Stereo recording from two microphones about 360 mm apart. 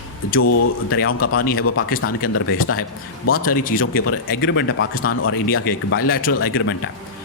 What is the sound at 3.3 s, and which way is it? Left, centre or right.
Speech, left.